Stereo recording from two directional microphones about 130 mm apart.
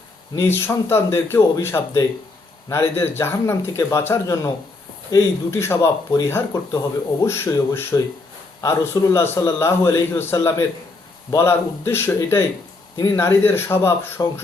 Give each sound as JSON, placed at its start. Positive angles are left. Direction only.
{"t": 0.3, "sound": "speech", "side_deg": 20}